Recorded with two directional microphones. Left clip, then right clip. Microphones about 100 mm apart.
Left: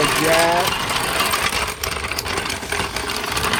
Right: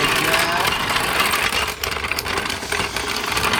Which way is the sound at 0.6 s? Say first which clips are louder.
Right 1 dB; 15° right (ahead or behind).